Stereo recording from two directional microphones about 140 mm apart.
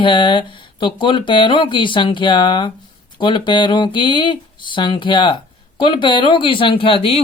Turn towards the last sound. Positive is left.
turn(degrees=40)  # may be behind; listen again after turning